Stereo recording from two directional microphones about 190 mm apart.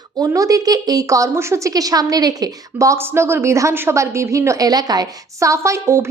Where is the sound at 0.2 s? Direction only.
20° right (ahead or behind).